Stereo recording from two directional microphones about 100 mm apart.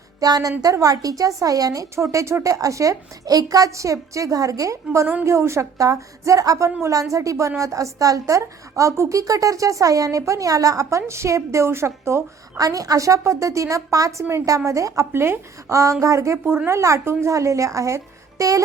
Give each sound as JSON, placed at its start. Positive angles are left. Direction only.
{"t": 0.2, "sound": "a woman's voice", "side_deg": -40}